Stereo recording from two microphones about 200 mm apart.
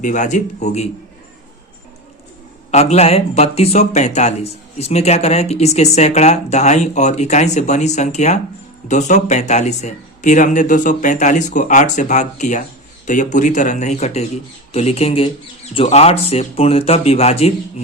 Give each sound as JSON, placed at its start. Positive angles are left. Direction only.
{"t": 0.0, "sound": "speech", "side_deg": 40}
{"t": 2.7, "sound": "speech", "side_deg": 35}